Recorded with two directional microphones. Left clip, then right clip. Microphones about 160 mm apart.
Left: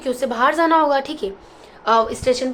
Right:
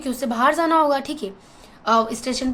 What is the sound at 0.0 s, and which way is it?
A woman's voice, 35° right (ahead or behind).